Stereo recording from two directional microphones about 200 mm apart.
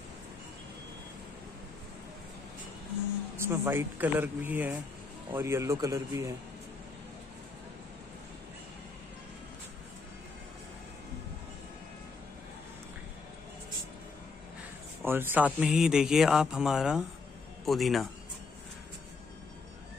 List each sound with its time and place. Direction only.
3.4 s speech: 10° right (ahead or behind)
15.0 s speech: 10° right (ahead or behind)